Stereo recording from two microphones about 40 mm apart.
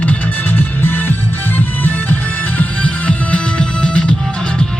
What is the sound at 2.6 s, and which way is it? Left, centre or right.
Music, left.